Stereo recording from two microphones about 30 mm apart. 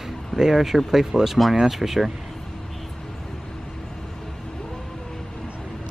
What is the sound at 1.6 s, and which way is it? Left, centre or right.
Speech, centre.